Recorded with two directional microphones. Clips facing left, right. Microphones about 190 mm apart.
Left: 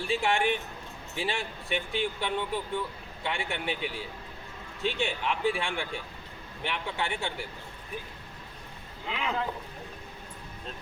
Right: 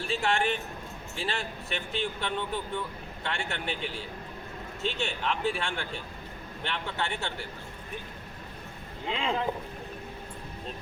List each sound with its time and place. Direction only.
0.1 s speech: 15° left (ahead or behind)
4.9 s speech: 15° left (ahead or behind)
9.0 s speech: 25° right (ahead or behind)